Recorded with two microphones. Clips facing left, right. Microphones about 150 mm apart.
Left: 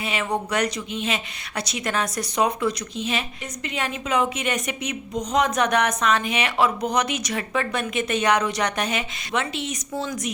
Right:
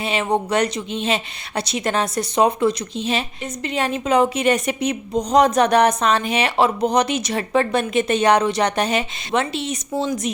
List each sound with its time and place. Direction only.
0.0 s speech: 30° right (ahead or behind)